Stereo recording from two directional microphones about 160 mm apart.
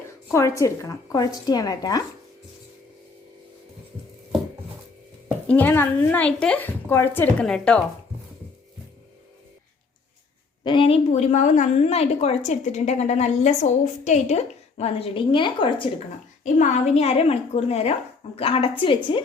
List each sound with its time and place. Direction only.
0.3 s a woman's voice: 15° left (ahead or behind)
5.5 s a woman's voice: 10° left (ahead or behind)
10.6 s a woman's voice: 30° left (ahead or behind)
16.4 s a woman's voice: 45° left (ahead or behind)